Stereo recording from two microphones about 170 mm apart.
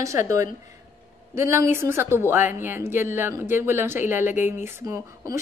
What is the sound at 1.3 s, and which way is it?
A woman's voice, 15° right (ahead or behind).